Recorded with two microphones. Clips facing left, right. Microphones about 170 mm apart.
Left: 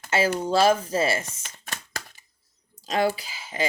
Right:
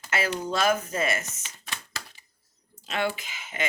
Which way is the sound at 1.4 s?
50° left (ahead or behind).